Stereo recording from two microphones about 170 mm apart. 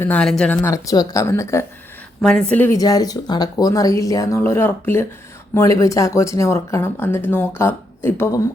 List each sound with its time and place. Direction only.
0.0 s speech: 5° left (ahead or behind)
2.2 s speech: 5° left (ahead or behind)
2.7 s speech: 20° left (ahead or behind)